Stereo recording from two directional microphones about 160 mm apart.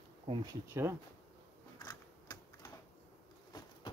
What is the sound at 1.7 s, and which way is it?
Typing, 25° left (ahead or behind).